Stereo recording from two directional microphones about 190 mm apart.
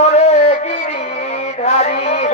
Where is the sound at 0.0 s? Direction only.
35° left (ahead or behind).